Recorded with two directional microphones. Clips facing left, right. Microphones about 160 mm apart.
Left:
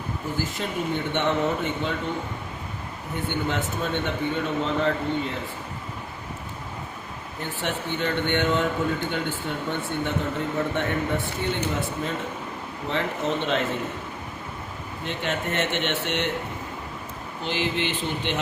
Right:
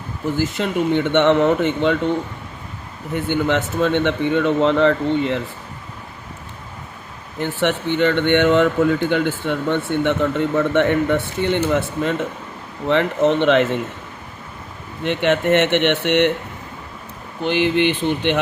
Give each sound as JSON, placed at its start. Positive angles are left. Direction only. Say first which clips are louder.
{"t": 0.3, "sound": "speech", "louder": "right 9 dB", "side_deg": -90}
{"t": 3.2, "sound": "a man's voice", "louder": "right 8 dB", "side_deg": -90}
{"t": 7.4, "sound": "a man's voice", "louder": "right 10 dB", "side_deg": -90}
{"t": 15.0, "sound": "speech", "louder": "right 11 dB", "side_deg": -75}
{"t": 17.4, "sound": "speech", "louder": "right 10 dB", "side_deg": -60}